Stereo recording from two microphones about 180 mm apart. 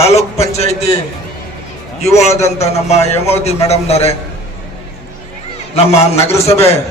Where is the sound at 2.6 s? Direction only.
35° left (ahead or behind).